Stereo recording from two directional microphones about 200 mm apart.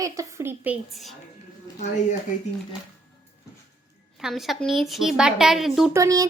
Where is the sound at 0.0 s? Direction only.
15° right (ahead or behind).